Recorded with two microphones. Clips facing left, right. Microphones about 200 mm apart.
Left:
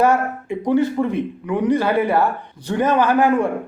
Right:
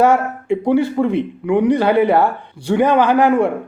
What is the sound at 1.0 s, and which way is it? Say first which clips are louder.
Speech: right 3 dB; 55° right (ahead or behind).